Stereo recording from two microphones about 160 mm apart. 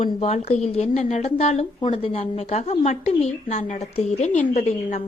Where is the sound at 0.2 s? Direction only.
40° left (ahead or behind).